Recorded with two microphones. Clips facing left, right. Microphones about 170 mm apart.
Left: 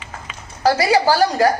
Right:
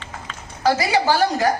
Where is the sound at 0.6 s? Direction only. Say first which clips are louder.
Left 3 dB; 35° left (ahead or behind).